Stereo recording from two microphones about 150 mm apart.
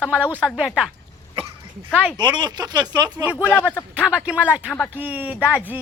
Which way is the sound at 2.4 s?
25° right (ahead or behind).